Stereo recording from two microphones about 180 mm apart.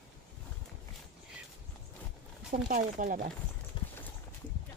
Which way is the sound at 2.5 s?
50° right (ahead or behind).